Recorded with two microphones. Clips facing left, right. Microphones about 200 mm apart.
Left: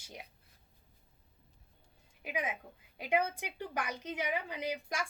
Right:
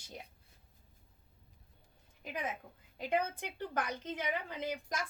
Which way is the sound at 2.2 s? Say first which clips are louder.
Left 2 dB; 10° left (ahead or behind).